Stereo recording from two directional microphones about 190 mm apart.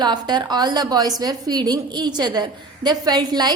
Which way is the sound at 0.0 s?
20° right (ahead or behind).